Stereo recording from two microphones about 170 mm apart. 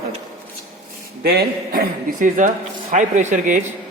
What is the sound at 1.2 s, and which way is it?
A man's voice, 70° right (ahead or behind).